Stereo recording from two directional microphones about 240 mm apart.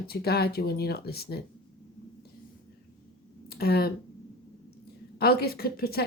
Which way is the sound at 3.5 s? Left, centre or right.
Left.